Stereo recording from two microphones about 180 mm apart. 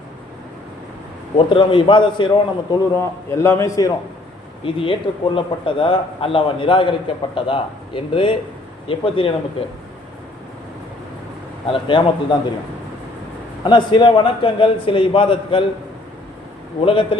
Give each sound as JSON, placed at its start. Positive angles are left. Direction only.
{"t": 1.5, "sound": "speech", "side_deg": 30}
{"t": 2.9, "sound": "a man's voice", "side_deg": 15}
{"t": 4.6, "sound": "speech", "side_deg": 30}
{"t": 11.7, "sound": "speech", "side_deg": 25}
{"t": 13.7, "sound": "speech", "side_deg": 25}
{"t": 16.8, "sound": "speech", "side_deg": 30}